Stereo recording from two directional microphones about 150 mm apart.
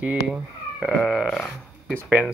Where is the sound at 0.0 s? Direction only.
5° right (ahead or behind).